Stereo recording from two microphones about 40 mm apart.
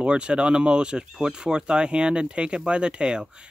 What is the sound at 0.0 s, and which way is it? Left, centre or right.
Speech, right.